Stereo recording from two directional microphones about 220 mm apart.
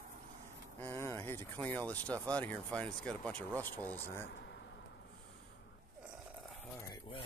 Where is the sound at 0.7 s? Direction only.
10° left (ahead or behind).